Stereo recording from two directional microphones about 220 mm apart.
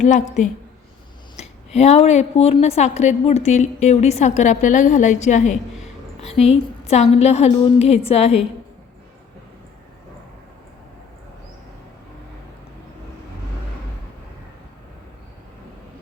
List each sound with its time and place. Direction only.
0.0 s a woman's voice: 35° left (ahead or behind)